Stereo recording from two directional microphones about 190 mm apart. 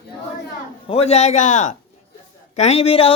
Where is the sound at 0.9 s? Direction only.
35° left (ahead or behind).